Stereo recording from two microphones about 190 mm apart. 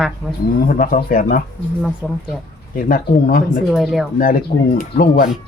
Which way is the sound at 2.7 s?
50° left (ahead or behind).